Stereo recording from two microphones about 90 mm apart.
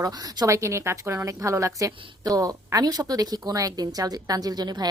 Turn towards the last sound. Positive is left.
turn(degrees=-50)  # may be behind; listen again after turning